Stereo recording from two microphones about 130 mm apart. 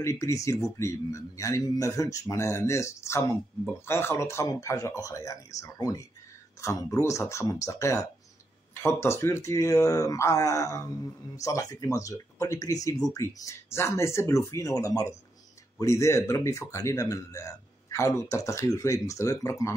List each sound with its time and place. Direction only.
0.0 s speech: 20° left (ahead or behind)